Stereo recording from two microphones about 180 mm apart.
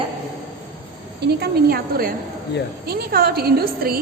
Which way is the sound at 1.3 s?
55° right (ahead or behind).